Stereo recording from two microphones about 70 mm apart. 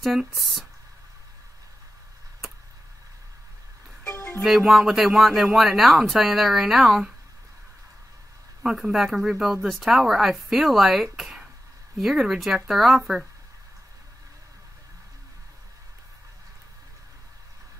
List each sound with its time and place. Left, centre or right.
0.2 s speech: centre
4.0 s music: left
4.4 s speech: centre
8.6 s speech: centre